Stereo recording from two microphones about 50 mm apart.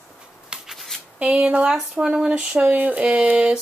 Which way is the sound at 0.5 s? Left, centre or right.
Centre.